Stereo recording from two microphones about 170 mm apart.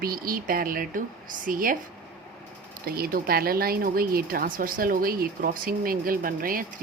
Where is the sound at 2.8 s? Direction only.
60° right (ahead or behind).